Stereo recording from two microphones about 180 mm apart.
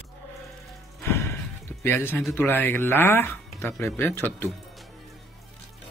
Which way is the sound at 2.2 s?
Centre (ahead or behind).